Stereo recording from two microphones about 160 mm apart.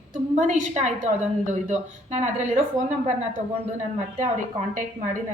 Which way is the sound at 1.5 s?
45° right (ahead or behind).